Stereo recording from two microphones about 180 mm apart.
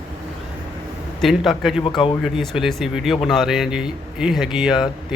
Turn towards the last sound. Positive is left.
turn(degrees=-5)  # may be behind; listen again after turning